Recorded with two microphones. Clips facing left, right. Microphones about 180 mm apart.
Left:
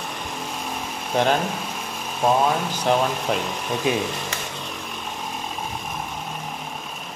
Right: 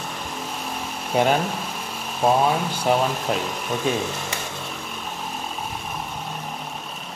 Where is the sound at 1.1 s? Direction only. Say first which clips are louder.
Right 1 dB; 5° right (ahead or behind).